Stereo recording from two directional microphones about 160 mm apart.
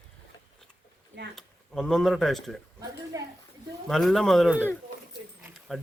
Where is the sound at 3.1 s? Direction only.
20° right (ahead or behind).